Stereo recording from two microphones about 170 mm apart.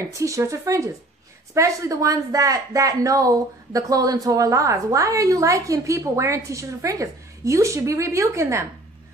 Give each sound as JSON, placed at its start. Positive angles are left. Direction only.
{"t": 0.1, "sound": "a woman's voice", "side_deg": -20}